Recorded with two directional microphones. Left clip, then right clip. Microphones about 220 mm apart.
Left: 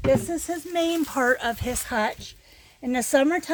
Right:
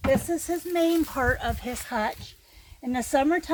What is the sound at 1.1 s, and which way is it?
Speech, 50° left (ahead or behind).